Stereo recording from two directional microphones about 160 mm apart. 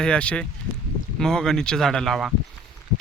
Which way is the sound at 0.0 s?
5° left (ahead or behind).